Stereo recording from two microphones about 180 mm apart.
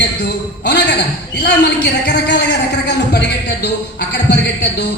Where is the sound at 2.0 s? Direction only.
65° left (ahead or behind).